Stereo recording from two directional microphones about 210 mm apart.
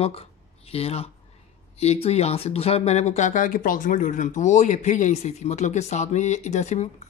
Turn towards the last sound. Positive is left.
turn(degrees=35)  # may be behind; listen again after turning